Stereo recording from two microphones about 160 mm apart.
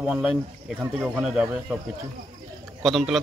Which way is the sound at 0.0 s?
5° right (ahead or behind).